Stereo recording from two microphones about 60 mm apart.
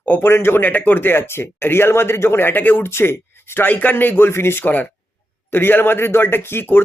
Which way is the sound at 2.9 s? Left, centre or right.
Left.